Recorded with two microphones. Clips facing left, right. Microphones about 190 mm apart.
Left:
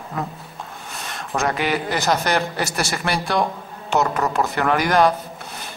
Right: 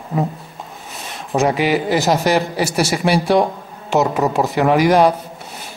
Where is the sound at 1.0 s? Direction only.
Centre (ahead or behind).